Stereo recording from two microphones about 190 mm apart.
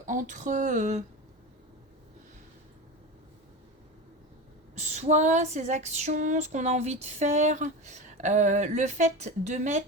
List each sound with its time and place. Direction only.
0.1 s female singing: 40° right (ahead or behind)
4.7 s female singing: 35° right (ahead or behind)